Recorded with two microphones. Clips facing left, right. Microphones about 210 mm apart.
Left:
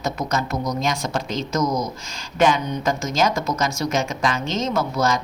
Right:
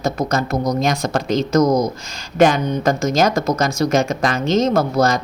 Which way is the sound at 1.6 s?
40° right (ahead or behind).